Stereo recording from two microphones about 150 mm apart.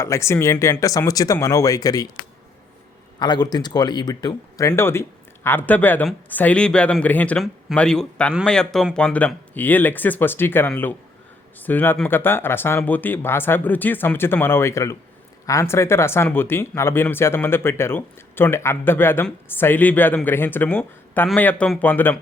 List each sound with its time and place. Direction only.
0.0 s speech: 20° left (ahead or behind)
3.2 s speech: 30° left (ahead or behind); by 22.2 s 10° left (ahead or behind)